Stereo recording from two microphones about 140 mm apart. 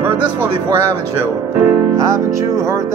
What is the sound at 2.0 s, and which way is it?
Speech, 20° right (ahead or behind).